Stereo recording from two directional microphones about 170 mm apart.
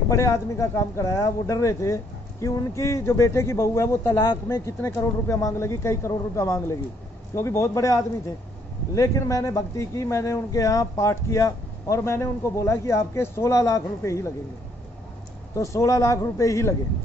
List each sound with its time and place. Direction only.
0.1 s speech: 15° left (ahead or behind)
15.5 s speech: 20° left (ahead or behind)